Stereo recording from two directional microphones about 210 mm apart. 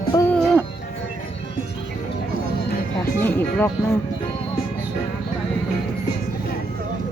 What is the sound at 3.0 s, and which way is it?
Music, 10° left (ahead or behind).